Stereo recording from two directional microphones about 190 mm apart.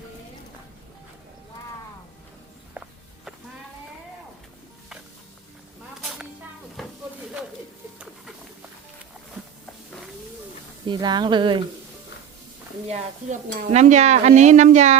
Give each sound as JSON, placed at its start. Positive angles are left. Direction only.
{"t": 6.8, "sound": "sizzle", "side_deg": 0}
{"t": 10.8, "sound": "a woman's voice", "side_deg": -25}
{"t": 13.3, "sound": "speech", "side_deg": -40}